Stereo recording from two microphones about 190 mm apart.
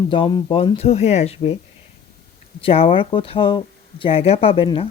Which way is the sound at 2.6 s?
30° left (ahead or behind).